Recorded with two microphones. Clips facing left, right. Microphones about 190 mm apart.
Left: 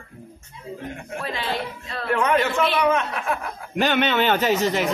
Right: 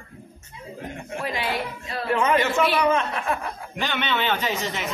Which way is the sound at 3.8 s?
45° left (ahead or behind).